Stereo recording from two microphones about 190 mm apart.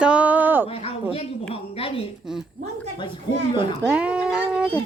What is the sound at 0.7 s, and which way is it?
A woman's voice, 30° left (ahead or behind).